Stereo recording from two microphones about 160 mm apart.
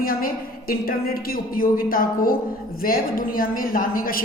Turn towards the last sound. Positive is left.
turn(degrees=65)  # may be behind; listen again after turning